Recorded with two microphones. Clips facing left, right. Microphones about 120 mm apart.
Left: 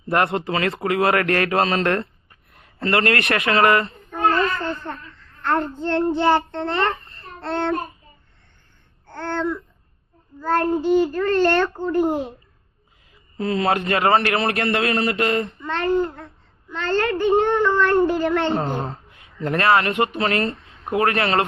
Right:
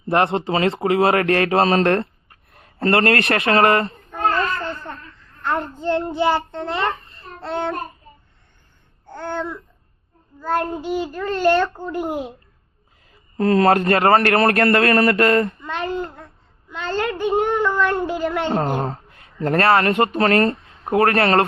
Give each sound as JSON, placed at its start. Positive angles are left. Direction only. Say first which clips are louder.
{"t": 0.1, "sound": "a man's voice", "louder": "right 2 dB", "side_deg": -30}
{"t": 5.4, "sound": "a child's voice", "louder": "left 2 dB", "side_deg": -10}
{"t": 9.0, "sound": "babbling", "louder": "left 2 dB", "side_deg": -10}
{"t": 10.4, "sound": "a child's voice", "louder": "left 3 dB", "side_deg": -10}
{"t": 13.3, "sound": "a man's voice", "louder": "right 6 dB", "side_deg": -50}
{"t": 15.6, "sound": "a child's voice", "louder": "left 4 dB", "side_deg": -10}
{"t": 18.8, "sound": "speech", "louder": "right 4 dB", "side_deg": -40}